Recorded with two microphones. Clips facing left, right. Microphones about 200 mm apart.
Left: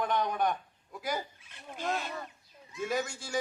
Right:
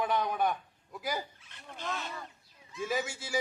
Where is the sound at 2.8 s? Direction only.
5° right (ahead or behind).